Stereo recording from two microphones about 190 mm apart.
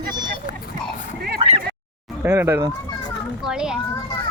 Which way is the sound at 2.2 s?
15° right (ahead or behind).